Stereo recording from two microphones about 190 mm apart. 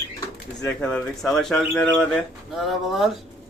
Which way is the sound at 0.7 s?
5° left (ahead or behind).